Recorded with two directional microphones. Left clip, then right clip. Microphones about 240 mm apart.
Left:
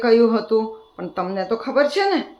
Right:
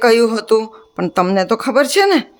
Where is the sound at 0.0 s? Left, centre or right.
Right.